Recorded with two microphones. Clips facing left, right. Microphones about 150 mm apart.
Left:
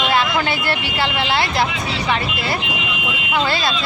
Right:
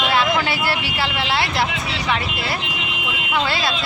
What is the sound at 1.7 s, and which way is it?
Speech, 65° right (ahead or behind).